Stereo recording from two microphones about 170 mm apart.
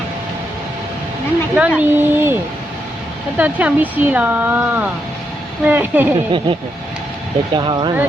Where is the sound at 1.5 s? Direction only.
5° right (ahead or behind).